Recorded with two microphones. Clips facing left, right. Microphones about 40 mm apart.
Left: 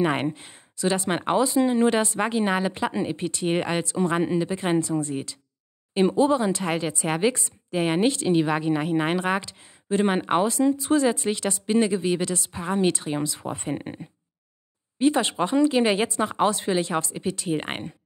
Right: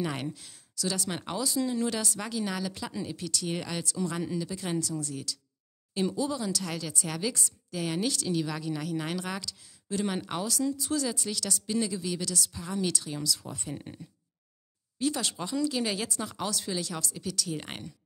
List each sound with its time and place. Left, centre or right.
0.0 s a woman's voice: left